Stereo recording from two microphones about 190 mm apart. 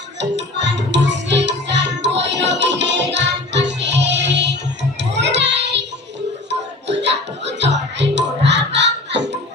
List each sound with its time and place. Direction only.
0.2 s music: 65° right (ahead or behind)